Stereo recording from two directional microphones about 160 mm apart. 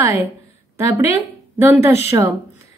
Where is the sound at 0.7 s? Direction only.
15° right (ahead or behind).